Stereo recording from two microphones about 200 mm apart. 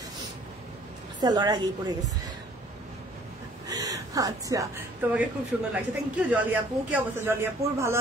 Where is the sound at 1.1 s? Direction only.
20° right (ahead or behind).